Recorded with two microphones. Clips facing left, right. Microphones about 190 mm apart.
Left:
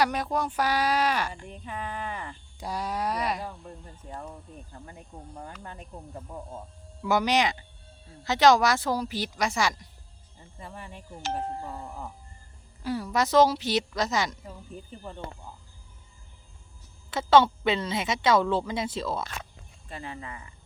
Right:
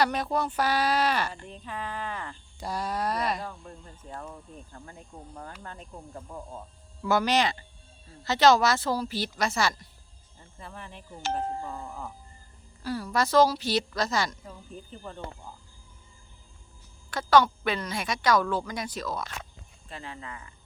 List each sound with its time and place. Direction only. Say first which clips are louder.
0.0 s speech: even; 10° left (ahead or behind)
7.0 s speech: even; 15° left (ahead or behind)
12.8 s a woman's voice: left 1 dB; 20° left (ahead or behind)
17.1 s a woman's voice: left 2 dB; 25° left (ahead or behind)
19.9 s speech: left 2 dB; 15° left (ahead or behind)